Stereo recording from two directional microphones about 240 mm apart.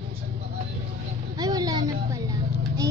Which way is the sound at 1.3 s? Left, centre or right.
Centre.